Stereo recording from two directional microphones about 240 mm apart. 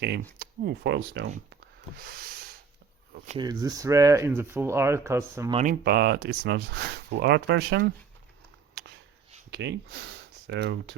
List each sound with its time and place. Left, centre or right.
0.3 s speech: right
3.2 s speech: centre
5.5 s speech: right
9.5 s speech: right